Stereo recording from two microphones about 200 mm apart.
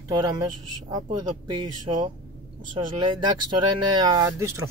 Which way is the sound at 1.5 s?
30° right (ahead or behind).